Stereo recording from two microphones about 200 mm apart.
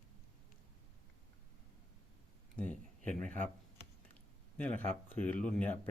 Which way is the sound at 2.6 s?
5° left (ahead or behind).